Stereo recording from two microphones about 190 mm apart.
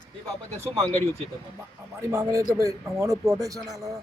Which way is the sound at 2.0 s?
15° right (ahead or behind).